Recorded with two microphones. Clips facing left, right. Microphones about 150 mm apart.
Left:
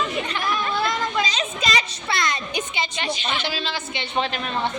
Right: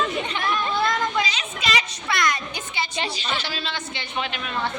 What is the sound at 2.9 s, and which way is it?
Speech, 30° right (ahead or behind).